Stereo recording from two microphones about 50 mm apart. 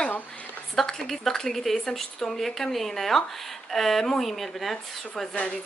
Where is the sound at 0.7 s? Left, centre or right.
Centre.